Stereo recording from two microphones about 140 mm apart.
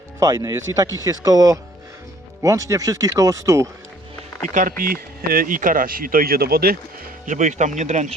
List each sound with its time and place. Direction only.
0.2 s speech: 25° right (ahead or behind)
4.4 s speech: 65° right (ahead or behind)
4.8 s speech: 90° right
7.3 s speech: 60° right (ahead or behind)